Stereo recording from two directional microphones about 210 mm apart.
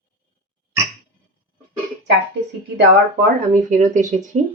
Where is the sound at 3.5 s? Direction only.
35° right (ahead or behind).